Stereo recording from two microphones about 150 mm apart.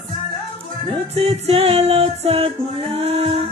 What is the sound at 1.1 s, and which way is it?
Music, 40° right (ahead or behind).